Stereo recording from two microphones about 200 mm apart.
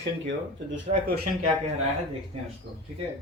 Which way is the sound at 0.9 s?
35° right (ahead or behind).